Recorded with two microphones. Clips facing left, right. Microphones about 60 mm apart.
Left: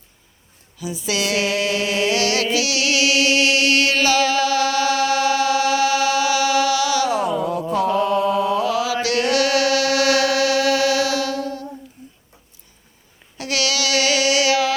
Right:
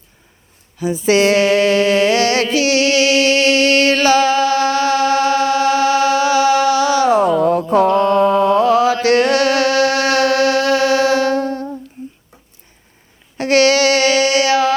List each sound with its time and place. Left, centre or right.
0.8 s a sound: right
7.3 s music: right
7.7 s mantra: right
13.3 s child singing: right